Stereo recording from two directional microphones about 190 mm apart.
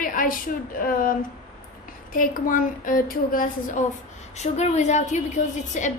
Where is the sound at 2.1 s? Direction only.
45° left (ahead or behind).